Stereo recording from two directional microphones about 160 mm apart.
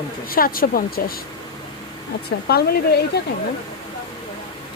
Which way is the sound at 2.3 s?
80° left.